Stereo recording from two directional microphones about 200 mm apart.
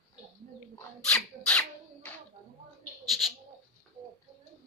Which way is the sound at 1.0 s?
5° left (ahead or behind).